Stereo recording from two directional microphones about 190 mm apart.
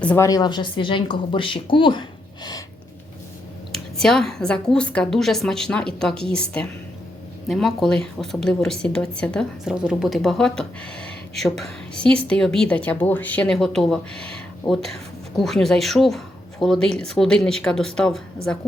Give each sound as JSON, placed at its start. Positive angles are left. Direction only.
{"t": 0.0, "sound": "speech", "side_deg": 10}
{"t": 0.3, "sound": "speech", "side_deg": 20}
{"t": 3.7, "sound": "speech", "side_deg": 0}